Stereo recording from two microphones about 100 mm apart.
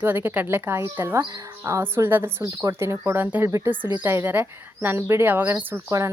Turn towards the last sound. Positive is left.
turn(degrees=-30)  # may be behind; listen again after turning